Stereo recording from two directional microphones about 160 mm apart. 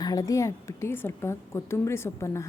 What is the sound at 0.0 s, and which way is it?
A woman's voice, 20° left (ahead or behind).